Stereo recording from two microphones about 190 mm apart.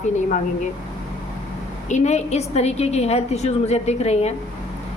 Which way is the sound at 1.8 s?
35° left (ahead or behind).